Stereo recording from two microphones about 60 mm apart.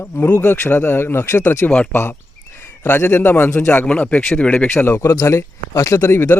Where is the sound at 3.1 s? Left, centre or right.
Left.